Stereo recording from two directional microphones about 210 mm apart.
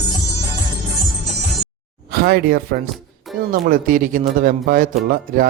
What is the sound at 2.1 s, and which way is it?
Speech, 45° right (ahead or behind).